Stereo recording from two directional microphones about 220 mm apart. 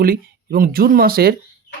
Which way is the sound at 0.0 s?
40° right (ahead or behind).